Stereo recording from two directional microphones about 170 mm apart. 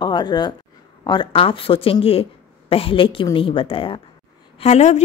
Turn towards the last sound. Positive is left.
turn(degrees=40)  # may be behind; listen again after turning